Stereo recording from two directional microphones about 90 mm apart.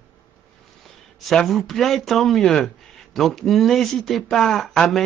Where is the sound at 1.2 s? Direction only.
5° left (ahead or behind).